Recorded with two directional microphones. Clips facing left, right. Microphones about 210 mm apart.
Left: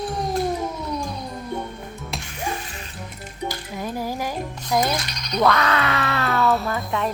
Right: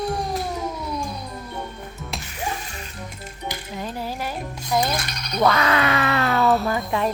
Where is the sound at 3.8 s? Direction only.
10° left (ahead or behind).